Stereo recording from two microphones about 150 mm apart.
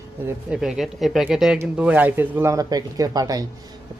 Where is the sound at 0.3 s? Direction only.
5° right (ahead or behind).